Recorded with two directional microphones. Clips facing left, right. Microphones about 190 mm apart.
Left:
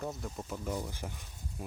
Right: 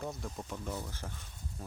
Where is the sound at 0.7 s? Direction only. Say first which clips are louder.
Left 3 dB; 15° left (ahead or behind).